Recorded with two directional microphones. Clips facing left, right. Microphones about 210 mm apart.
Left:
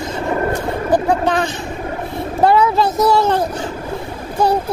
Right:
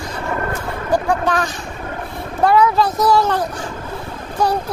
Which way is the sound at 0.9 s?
25° left (ahead or behind).